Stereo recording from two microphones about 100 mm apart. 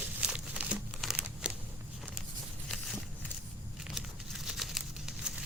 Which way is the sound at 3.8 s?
5° right (ahead or behind).